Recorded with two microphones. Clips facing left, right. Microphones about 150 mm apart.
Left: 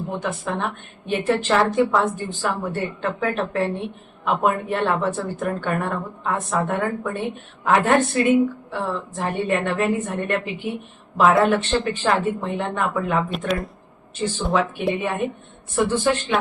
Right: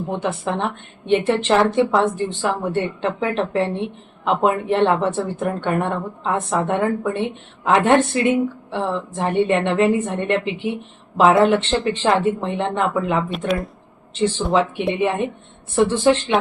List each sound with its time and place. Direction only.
0.1 s a woman's voice: 30° right (ahead or behind)
13.5 s speech: centre (ahead or behind)
14.1 s a woman's voice: 25° right (ahead or behind)